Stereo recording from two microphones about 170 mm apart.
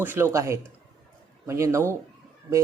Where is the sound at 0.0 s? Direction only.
15° right (ahead or behind).